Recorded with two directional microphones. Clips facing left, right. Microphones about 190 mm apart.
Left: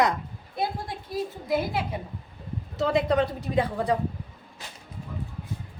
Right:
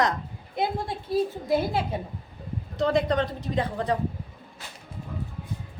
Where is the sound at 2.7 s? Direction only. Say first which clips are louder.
Even; 5° left (ahead or behind).